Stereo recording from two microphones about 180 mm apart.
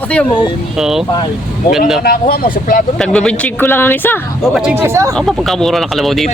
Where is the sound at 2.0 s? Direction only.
55° left (ahead or behind).